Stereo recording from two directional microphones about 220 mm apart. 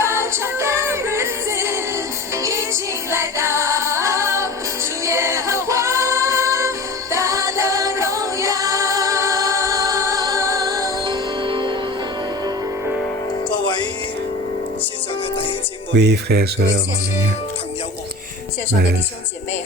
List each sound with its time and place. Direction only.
0.0 s music: 10° right (ahead or behind)
13.5 s music: 20° left (ahead or behind)
16.0 s speech: 50° right (ahead or behind)